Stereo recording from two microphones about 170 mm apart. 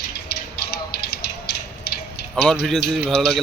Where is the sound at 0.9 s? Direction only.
75° left (ahead or behind).